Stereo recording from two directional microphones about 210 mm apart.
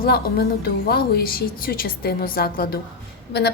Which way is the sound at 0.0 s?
50° left (ahead or behind).